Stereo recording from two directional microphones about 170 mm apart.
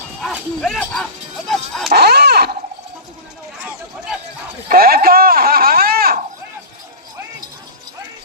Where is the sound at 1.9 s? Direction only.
70° right (ahead or behind).